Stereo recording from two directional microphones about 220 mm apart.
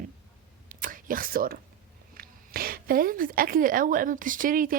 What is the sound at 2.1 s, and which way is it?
A woman's voice, 45° right (ahead or behind).